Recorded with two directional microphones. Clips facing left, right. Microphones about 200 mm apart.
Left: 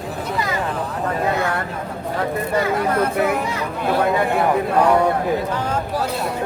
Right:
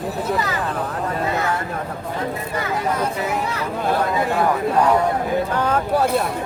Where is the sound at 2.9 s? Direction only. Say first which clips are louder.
Left 4 dB; 60° left (ahead or behind).